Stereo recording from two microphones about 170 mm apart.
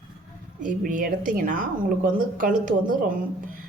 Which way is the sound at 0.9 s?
50° right (ahead or behind).